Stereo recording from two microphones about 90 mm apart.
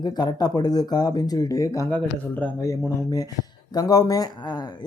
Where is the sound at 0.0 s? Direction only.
50° left (ahead or behind).